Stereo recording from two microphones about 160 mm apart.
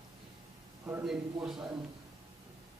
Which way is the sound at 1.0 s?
5° right (ahead or behind).